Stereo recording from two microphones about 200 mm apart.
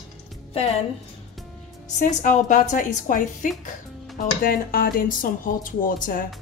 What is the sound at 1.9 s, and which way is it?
A woman's voice, 40° left (ahead or behind).